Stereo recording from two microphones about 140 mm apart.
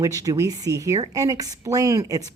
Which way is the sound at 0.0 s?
25° right (ahead or behind).